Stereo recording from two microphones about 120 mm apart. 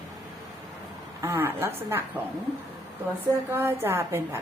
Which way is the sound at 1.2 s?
20° right (ahead or behind).